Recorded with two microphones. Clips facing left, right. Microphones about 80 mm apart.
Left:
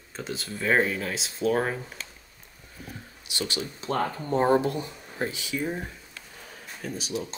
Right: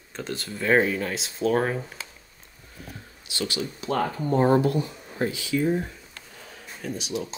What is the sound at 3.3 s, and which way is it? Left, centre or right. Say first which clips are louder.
Speech: right 2 dB; left.